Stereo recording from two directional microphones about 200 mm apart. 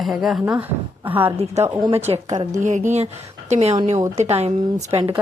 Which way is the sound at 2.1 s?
25° right (ahead or behind).